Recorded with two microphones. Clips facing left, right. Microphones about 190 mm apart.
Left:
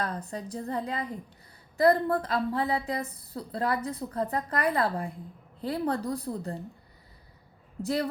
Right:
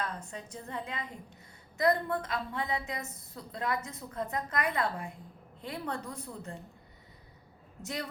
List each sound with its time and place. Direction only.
0.0 s a woman's voice: 35° left (ahead or behind)
7.8 s a woman's voice: 35° left (ahead or behind)